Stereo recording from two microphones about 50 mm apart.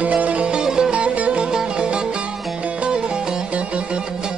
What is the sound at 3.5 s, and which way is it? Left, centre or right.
Music, right.